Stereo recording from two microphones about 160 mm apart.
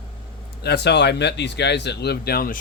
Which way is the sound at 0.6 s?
90° left.